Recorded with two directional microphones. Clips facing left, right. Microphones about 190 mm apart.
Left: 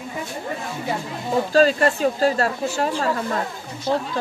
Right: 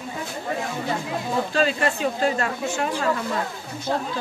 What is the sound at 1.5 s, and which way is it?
Speech, 40° left (ahead or behind).